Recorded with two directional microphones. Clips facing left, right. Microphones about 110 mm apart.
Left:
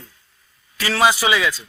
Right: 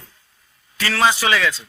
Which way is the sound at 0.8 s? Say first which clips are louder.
Left 1 dB; 15° left (ahead or behind).